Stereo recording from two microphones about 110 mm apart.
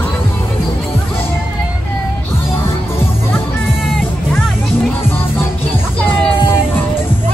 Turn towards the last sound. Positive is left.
turn(degrees=20)  # may be behind; listen again after turning